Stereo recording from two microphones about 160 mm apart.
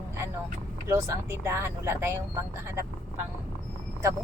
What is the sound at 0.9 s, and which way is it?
Speech, 15° right (ahead or behind).